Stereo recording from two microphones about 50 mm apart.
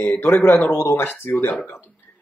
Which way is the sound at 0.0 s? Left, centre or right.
Left.